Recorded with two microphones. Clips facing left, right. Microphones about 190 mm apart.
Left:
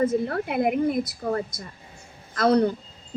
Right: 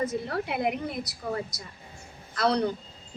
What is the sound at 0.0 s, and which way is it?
A woman's voice, 50° left (ahead or behind).